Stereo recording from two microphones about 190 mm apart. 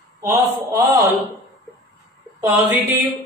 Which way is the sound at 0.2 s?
20° right (ahead or behind).